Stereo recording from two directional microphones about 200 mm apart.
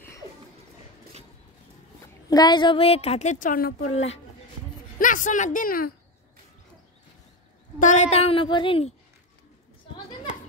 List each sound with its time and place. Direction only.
2.2 s a woman's voice: 20° left (ahead or behind); by 3.9 s 45° left (ahead or behind)
4.9 s a woman's voice: 40° left (ahead or behind)
7.8 s a woman's voice: 35° left (ahead or behind)